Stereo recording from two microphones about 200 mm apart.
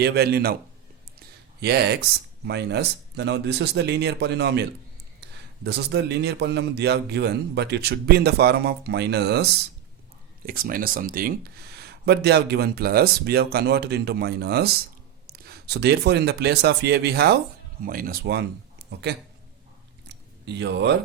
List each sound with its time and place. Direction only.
0.0 s speech: 55° right (ahead or behind)
1.6 s a man's voice: 55° right (ahead or behind)
5.6 s a man's voice: 55° right (ahead or behind)
20.5 s a man's voice: 60° right (ahead or behind)